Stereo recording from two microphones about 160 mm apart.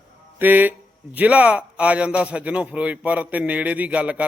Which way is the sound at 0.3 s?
10° right (ahead or behind).